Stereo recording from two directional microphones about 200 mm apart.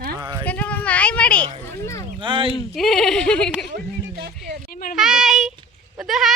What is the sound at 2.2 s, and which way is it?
Speech, 25° right (ahead or behind).